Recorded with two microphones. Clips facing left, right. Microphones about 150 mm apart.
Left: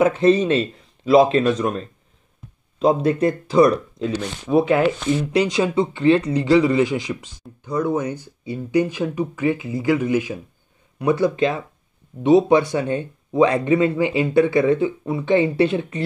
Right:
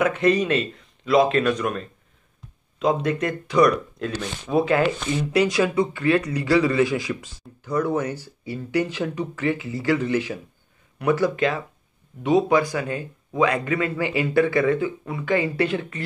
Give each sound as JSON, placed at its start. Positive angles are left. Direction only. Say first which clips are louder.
{"t": 0.0, "sound": "speech", "louder": "left 4 dB", "side_deg": 30}
{"t": 4.0, "sound": "speech", "louder": "left 4 dB", "side_deg": 5}
{"t": 5.3, "sound": "speech", "louder": "right 1 dB", "side_deg": 25}